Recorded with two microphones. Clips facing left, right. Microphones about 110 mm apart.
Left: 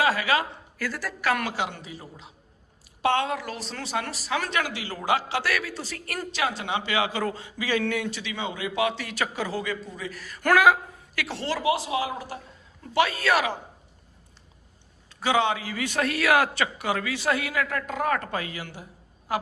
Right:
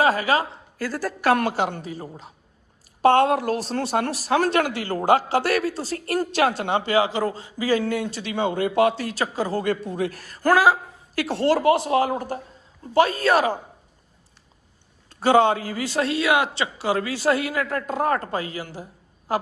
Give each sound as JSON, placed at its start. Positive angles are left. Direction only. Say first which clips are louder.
{"t": 0.0, "sound": "a man's voice", "louder": "right 4 dB", "side_deg": -40}
{"t": 6.3, "sound": "a man's voice", "louder": "right 5 dB", "side_deg": -50}
{"t": 15.1, "sound": "a man's voice", "louder": "right 6 dB", "side_deg": -45}